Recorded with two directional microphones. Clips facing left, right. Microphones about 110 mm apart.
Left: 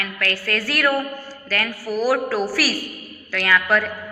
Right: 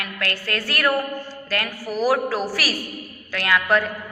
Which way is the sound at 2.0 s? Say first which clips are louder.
Even; 20° right (ahead or behind).